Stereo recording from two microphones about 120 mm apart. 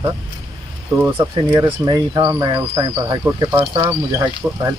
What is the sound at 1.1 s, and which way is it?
Speech, 40° right (ahead or behind).